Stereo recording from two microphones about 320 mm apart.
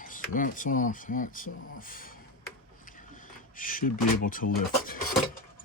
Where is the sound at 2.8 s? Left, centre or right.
Left.